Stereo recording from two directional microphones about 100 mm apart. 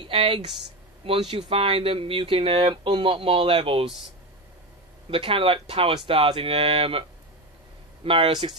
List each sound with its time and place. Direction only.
0.0 s speech: 60° right (ahead or behind)
5.1 s speech: 65° right (ahead or behind)
8.3 s speech: 50° right (ahead or behind)